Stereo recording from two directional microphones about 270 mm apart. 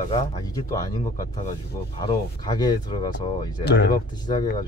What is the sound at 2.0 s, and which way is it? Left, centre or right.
Speech, centre.